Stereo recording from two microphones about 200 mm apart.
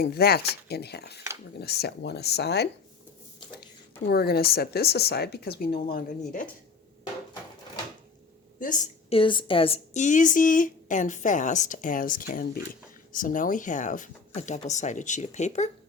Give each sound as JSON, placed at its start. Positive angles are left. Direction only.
{"t": 0.0, "sound": "speech", "side_deg": 50}
{"t": 4.0, "sound": "speech", "side_deg": 50}
{"t": 8.5, "sound": "a woman's voice", "side_deg": 40}